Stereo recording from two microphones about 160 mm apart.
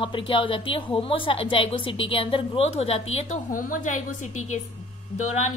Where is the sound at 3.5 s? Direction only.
60° left (ahead or behind).